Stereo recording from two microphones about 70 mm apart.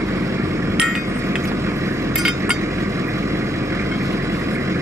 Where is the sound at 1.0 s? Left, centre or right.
Right.